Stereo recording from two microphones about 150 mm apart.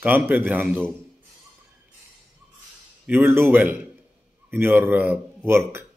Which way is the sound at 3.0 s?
15° right (ahead or behind).